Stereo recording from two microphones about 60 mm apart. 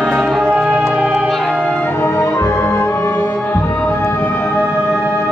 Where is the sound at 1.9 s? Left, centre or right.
Left.